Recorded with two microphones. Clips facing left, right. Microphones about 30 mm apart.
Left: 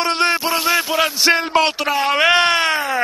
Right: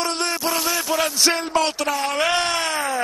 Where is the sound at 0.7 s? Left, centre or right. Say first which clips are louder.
Left 7 dB; left.